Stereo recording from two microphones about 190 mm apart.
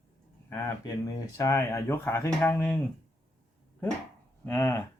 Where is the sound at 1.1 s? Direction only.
15° left (ahead or behind).